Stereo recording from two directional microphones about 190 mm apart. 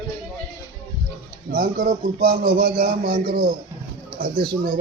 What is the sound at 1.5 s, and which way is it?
A man's voice, 50° right (ahead or behind).